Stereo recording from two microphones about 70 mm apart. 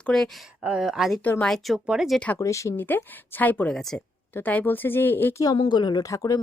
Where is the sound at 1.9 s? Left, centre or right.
Centre.